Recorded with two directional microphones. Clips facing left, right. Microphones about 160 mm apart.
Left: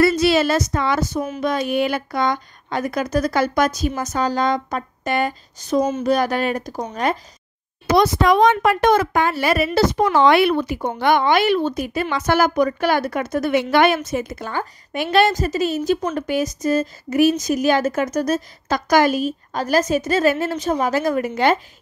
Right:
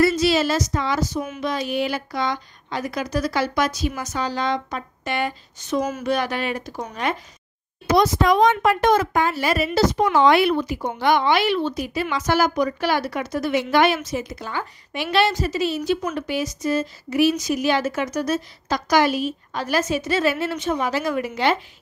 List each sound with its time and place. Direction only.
0.0 s a woman's voice: 60° left (ahead or behind); by 7.2 s 40° left (ahead or behind)
7.8 s a woman's voice: 70° left (ahead or behind); by 21.5 s 45° left (ahead or behind)